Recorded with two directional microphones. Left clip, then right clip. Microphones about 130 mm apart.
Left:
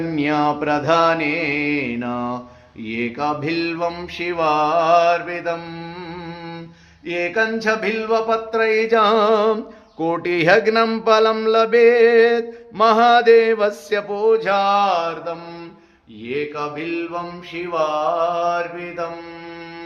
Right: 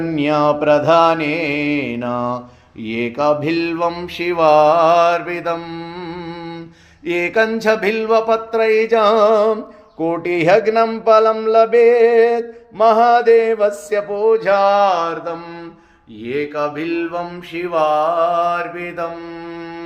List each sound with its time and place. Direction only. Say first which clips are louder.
0.2 s mantra: right 4 dB; 15° right (ahead or behind); by 5.6 s 35° right (ahead or behind)
7.1 s mantra: right 4 dB; 45° right (ahead or behind)
8.5 s music: right 2 dB; 15° right (ahead or behind); by 9.6 s centre (ahead or behind)
10.0 s mantra: right 2 dB; 10° left (ahead or behind)
14.3 s mantra: right 5 dB; 15° right (ahead or behind); by 19.0 s 40° right (ahead or behind)